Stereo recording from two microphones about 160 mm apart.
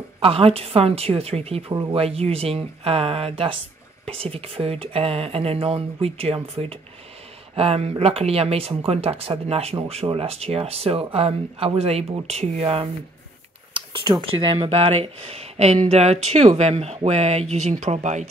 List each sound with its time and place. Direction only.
0.2 s speech: 35° right (ahead or behind)